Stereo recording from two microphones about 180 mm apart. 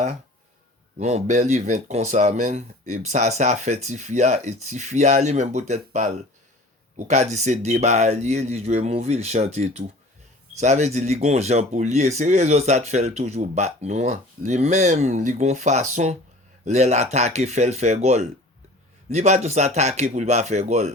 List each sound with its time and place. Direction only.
0.9 s speech: 40° right (ahead or behind)